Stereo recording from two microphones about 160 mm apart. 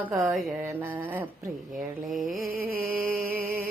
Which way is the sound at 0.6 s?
10° right (ahead or behind).